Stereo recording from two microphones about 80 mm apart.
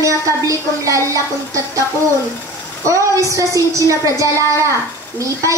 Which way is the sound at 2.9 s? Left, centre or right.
Right.